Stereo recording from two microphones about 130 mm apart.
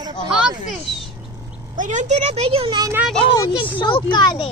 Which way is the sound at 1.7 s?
75° right (ahead or behind).